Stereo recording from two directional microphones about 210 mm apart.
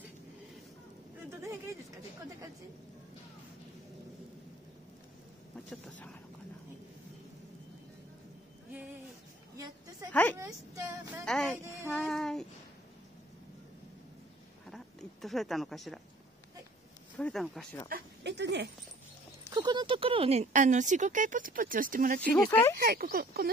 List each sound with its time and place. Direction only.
1.4 s a sound: 15° right (ahead or behind)
5.7 s speech: 5° left (ahead or behind)
10.4 s speech: 15° right (ahead or behind)
11.2 s speech: 5° left (ahead or behind)
11.9 s child singing: centre (ahead or behind)
14.7 s a sound: centre (ahead or behind)
17.2 s speech: centre (ahead or behind)
17.8 s speech: 50° right (ahead or behind)
19.4 s speech: 20° right (ahead or behind); by 22.2 s 40° right (ahead or behind)
22.2 s speech: 10° left (ahead or behind)
22.8 s speech: 45° right (ahead or behind)